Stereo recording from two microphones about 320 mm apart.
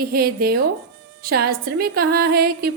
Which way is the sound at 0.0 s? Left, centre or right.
Right.